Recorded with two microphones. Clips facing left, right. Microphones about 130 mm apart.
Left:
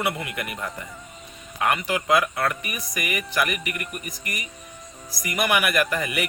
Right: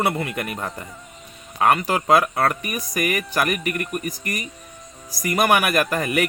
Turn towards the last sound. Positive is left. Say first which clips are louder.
# right 4 dB
turn(degrees=-45)  # may be behind; listen again after turning